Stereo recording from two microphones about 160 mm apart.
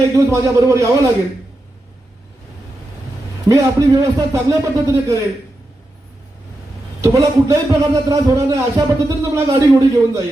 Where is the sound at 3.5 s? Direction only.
20° right (ahead or behind).